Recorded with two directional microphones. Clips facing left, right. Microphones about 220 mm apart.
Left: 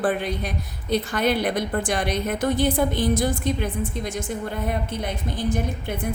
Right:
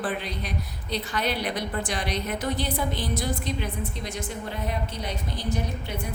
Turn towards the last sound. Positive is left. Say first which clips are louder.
# left 5 dB
turn(degrees=50)  # may be behind; listen again after turning